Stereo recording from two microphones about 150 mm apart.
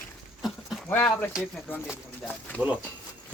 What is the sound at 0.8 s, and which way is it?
Speech, 10° left (ahead or behind).